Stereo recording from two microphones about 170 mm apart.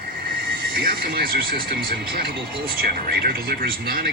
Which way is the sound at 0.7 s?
60° right (ahead or behind).